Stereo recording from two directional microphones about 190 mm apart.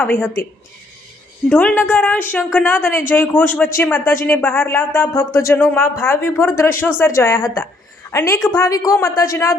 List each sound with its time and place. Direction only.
1.5 s speech: 10° left (ahead or behind)